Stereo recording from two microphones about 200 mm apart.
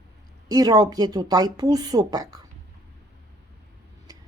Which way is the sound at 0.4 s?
20° right (ahead or behind).